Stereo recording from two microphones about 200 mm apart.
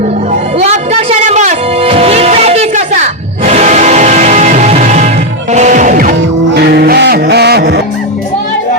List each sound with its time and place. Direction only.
0.6 s music: 35° right (ahead or behind); by 7.8 s 55° right (ahead or behind)